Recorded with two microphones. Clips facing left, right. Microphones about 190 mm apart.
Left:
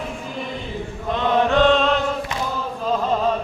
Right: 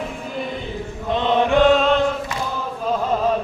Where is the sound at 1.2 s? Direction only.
20° right (ahead or behind).